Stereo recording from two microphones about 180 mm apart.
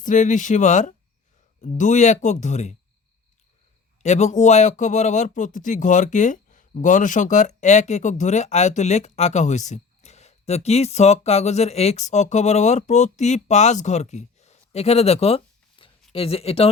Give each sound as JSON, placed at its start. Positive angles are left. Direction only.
{"t": 0.0, "sound": "speech", "side_deg": 45}
{"t": 4.0, "sound": "speech", "side_deg": 40}
{"t": 15.8, "sound": "a sound", "side_deg": 30}
{"t": 16.1, "sound": "speech", "side_deg": 30}